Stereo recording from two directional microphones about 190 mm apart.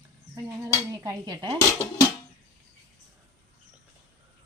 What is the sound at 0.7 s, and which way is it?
Cutlery, 15° right (ahead or behind).